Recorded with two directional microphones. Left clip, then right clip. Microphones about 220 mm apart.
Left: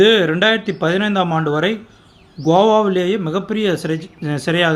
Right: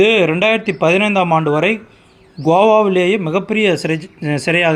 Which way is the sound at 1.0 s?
5° right (ahead or behind).